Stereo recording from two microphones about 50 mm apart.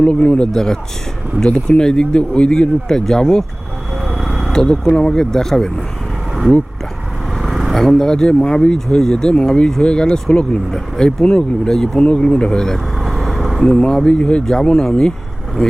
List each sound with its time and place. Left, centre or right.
0.0 s speech: centre
4.0 s a sound: centre
4.5 s speech: centre
7.4 s vehicle: centre
7.8 s speech: centre
13.6 s speech: centre